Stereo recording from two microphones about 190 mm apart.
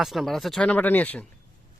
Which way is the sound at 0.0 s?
Centre (ahead or behind).